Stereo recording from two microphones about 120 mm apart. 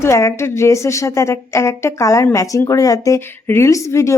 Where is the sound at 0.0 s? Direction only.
25° left (ahead or behind).